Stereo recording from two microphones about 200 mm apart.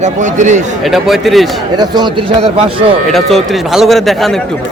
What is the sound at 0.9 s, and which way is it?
Speech, centre (ahead or behind).